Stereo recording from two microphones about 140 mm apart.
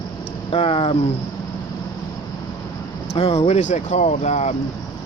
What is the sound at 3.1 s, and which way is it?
Speech, 45° left (ahead or behind).